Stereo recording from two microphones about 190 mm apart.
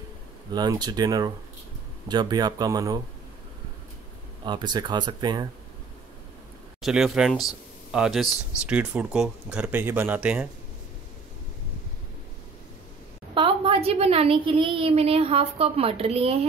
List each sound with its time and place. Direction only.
0.5 s speech: 20° right (ahead or behind)
4.5 s speech: 20° right (ahead or behind)
6.8 s speech: 5° right (ahead or behind)
13.3 s a woman's voice: 25° right (ahead or behind)